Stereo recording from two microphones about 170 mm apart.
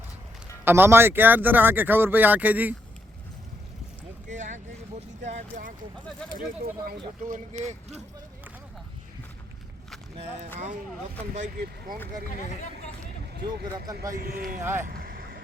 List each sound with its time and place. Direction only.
0.6 s a man's voice: 15° right (ahead or behind)
4.3 s vehicle: 45° right (ahead or behind)
7.3 s speech: 45° right (ahead or behind)
11.5 s speech: 65° right (ahead or behind)
13.7 s a man's voice: 20° right (ahead or behind)
14.2 s speech: 60° right (ahead or behind)
14.6 s a man's voice: 15° right (ahead or behind)
14.8 s vehicle: 60° right (ahead or behind)